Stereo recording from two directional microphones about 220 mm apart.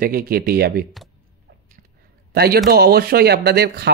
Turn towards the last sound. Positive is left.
turn(degrees=-45)  # may be behind; listen again after turning